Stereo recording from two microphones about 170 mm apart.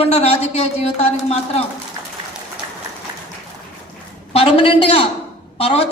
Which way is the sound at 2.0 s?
15° right (ahead or behind).